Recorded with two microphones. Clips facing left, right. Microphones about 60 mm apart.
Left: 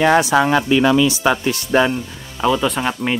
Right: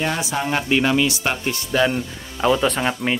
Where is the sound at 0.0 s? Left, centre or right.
Left.